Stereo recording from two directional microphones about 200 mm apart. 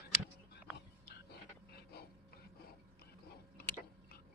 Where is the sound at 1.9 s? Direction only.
50° left (ahead or behind).